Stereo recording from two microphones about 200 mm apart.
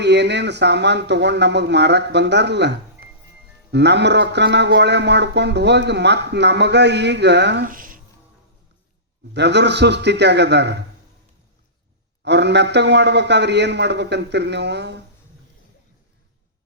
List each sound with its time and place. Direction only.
0.0 s a man's voice: 60° right (ahead or behind)
9.3 s a man's voice: 60° right (ahead or behind)
12.2 s a man's voice: 60° right (ahead or behind)